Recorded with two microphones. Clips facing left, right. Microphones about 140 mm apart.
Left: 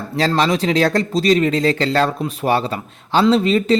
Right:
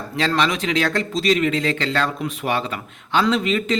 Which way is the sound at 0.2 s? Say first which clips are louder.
Left 4 dB; 35° left (ahead or behind).